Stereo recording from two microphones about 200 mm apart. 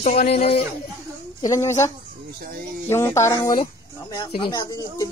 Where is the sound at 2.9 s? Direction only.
10° left (ahead or behind).